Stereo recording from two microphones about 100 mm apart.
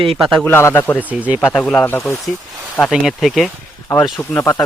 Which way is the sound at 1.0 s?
15° right (ahead or behind).